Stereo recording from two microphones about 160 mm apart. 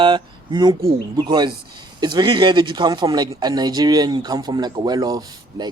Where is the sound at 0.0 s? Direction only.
30° right (ahead or behind).